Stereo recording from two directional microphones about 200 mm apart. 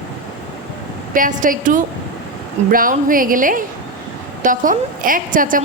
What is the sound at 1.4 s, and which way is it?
A woman's voice, 40° right (ahead or behind).